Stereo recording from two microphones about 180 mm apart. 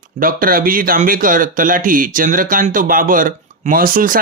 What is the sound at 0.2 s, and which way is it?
Speech, 50° right (ahead or behind).